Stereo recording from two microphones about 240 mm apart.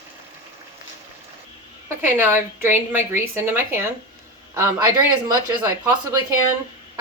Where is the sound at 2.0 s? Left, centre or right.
Centre.